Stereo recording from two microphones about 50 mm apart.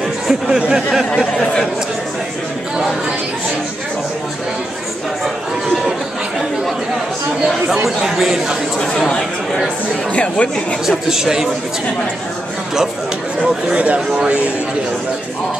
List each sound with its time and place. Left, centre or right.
0.3 s speech: centre
1.4 s speech: centre
7.8 s speech: centre
8.8 s speech: centre
10.1 s speech: left
10.9 s speech: centre
13.7 s speech: right